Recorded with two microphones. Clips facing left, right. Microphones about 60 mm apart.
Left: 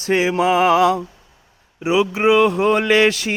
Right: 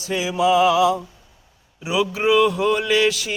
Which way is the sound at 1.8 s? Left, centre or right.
Left.